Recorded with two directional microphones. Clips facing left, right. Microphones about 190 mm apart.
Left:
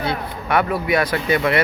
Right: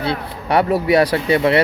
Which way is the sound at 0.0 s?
30° right (ahead or behind).